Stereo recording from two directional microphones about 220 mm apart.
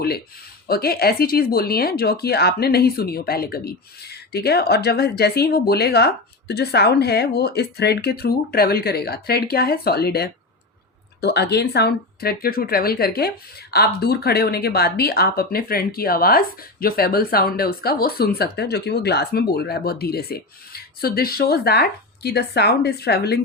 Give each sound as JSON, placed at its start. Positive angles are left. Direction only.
{"t": 0.7, "sound": "speech", "side_deg": 45}